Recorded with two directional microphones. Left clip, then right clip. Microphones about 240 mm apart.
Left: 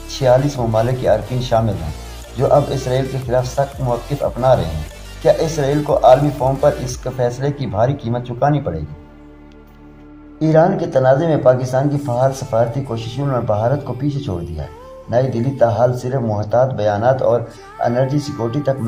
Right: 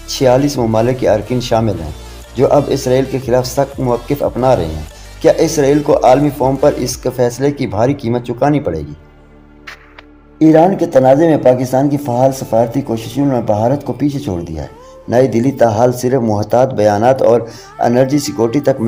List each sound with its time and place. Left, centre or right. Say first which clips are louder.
0.1 s speech: right 3 dB; right
10.4 s speech: right 5 dB; right
15.1 s speech: right 6 dB; right